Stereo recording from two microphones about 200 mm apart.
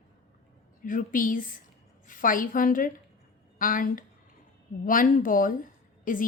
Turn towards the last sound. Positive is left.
turn(degrees=45)  # may be behind; listen again after turning